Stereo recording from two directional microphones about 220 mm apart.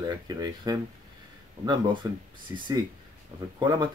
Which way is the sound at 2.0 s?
15° right (ahead or behind).